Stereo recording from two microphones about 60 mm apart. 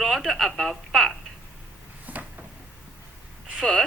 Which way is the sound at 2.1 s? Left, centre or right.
Right.